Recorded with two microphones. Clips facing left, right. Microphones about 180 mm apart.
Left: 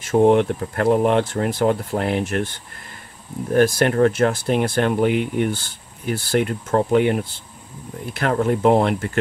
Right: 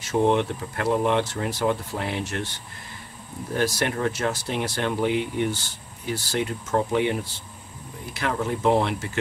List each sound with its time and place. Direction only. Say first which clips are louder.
0.0 s speech: left 6 dB; 50° left (ahead or behind)